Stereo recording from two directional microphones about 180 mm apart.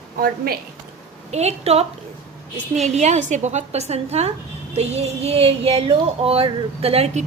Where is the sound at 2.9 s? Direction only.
40° right (ahead or behind).